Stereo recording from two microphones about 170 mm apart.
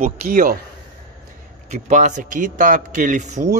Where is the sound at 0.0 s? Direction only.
55° right (ahead or behind).